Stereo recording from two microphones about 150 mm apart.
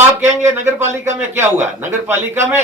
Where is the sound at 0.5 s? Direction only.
15° right (ahead or behind).